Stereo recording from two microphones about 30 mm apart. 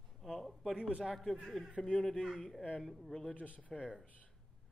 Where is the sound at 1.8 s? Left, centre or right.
Left.